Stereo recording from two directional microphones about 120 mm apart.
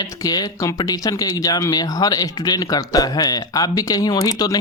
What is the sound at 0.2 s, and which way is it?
Speech, 30° left (ahead or behind).